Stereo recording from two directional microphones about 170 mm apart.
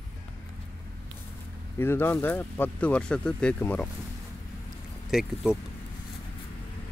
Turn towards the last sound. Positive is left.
turn(degrees=-5)  # may be behind; listen again after turning